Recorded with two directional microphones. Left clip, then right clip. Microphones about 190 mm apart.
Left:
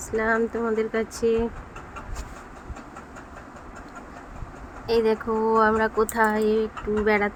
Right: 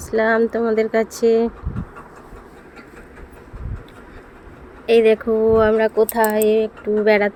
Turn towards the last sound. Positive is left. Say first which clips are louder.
# right 7 dB
turn(degrees=-20)  # may be behind; listen again after turning